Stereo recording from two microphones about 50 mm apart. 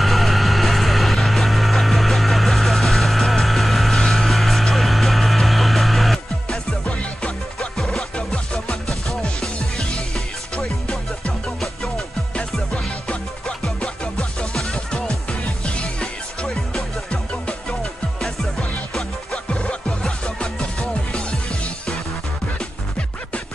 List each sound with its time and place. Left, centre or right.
0.0 s vehicle: centre
6.5 s music: centre
10.5 s music: left
12.7 s music: left
14.1 s music: centre
19.3 s music: left